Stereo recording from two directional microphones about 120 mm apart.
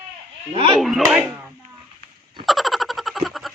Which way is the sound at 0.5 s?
55° right (ahead or behind).